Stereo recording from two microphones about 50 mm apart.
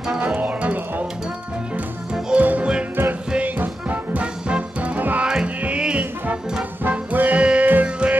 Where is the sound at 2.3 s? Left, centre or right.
Right.